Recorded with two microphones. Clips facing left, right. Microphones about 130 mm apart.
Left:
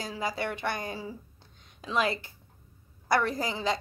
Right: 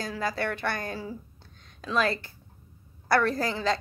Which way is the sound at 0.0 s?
20° left (ahead or behind).